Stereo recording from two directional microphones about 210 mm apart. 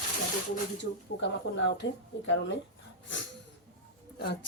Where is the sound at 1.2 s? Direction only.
55° left (ahead or behind).